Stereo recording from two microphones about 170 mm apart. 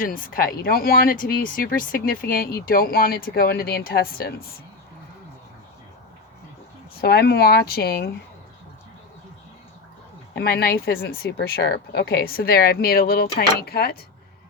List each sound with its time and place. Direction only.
0.0 s speech: 55° left (ahead or behind)
6.9 s speech: 65° left (ahead or behind)
10.3 s speech: 65° left (ahead or behind)